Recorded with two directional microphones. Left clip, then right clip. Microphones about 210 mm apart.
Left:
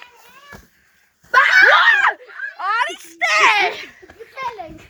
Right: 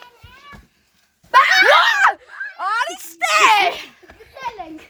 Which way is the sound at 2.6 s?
15° right (ahead or behind).